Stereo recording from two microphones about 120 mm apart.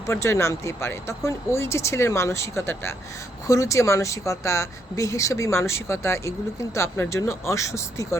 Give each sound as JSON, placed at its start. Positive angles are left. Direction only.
{"t": 0.1, "sound": "speech", "side_deg": 25}